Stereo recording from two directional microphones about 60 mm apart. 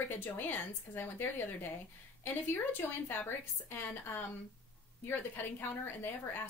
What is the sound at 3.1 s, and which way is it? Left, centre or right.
A woman's voice, left.